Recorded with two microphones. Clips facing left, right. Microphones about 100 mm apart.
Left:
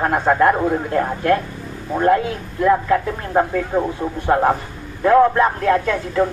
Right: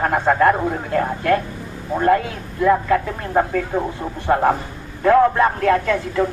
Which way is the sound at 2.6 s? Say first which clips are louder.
Even; 15° left (ahead or behind).